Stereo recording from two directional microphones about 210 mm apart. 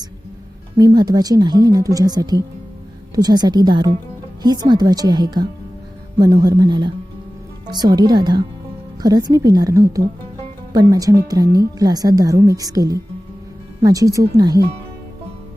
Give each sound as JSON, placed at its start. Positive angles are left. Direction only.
{"t": 0.8, "sound": "speech", "side_deg": -20}